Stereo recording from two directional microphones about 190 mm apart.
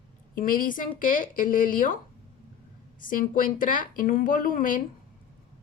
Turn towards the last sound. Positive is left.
turn(degrees=45)  # may be behind; listen again after turning